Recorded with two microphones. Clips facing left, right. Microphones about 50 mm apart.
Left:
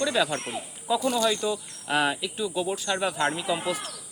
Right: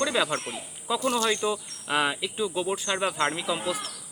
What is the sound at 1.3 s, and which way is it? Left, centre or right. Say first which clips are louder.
Speech: right 1 dB; right.